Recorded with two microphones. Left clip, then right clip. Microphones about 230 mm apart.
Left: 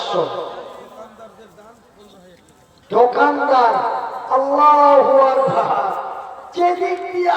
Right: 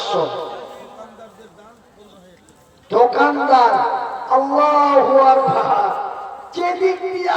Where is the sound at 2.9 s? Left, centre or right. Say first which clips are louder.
Even; right.